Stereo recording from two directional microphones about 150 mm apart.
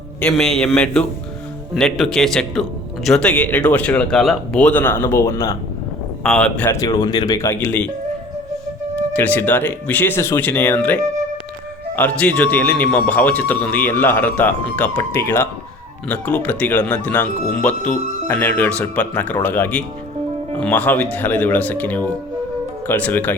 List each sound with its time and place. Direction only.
0.2 s a man's voice: 5° left (ahead or behind); by 5.5 s 20° left (ahead or behind)
6.2 s a man's voice: 5° left (ahead or behind)
6.7 s speech: 25° left (ahead or behind)
7.3 s a man's voice: 15° left (ahead or behind)
9.1 s a man's voice: 10° left (ahead or behind)